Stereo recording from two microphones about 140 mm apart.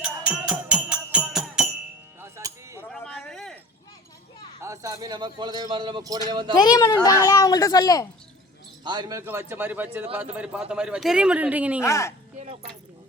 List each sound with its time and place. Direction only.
0.0 s music: 5° right (ahead or behind)
2.2 s music: 20° right (ahead or behind)
2.9 s a sound: 5° left (ahead or behind)
4.6 s a man's voice: 20° right (ahead or behind)
6.5 s a woman's voice: 25° left (ahead or behind)
8.8 s speech: 30° right (ahead or behind)
9.2 s speech: 15° right (ahead or behind)
11.8 s a woman's voice: 20° left (ahead or behind)